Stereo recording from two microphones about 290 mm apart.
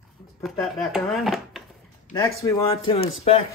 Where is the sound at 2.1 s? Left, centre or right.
Centre.